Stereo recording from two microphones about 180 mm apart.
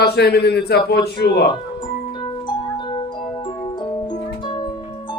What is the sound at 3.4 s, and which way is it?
Music, 25° left (ahead or behind).